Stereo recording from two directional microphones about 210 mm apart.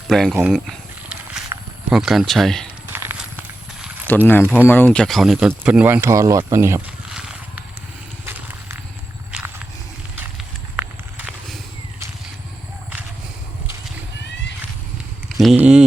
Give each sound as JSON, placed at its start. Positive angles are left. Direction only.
{"t": 0.1, "sound": "speech", "side_deg": 0}
{"t": 1.5, "sound": "a sound", "side_deg": -15}
{"t": 1.9, "sound": "speech", "side_deg": 0}
{"t": 2.9, "sound": "a sound", "side_deg": -10}
{"t": 4.3, "sound": "speech", "side_deg": 10}
{"t": 7.1, "sound": "horse", "side_deg": -5}
{"t": 10.2, "sound": "clip-clop", "side_deg": -10}
{"t": 15.4, "sound": "speech", "side_deg": 0}